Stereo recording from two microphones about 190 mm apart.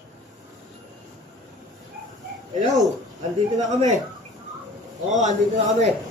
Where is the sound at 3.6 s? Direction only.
40° right (ahead or behind).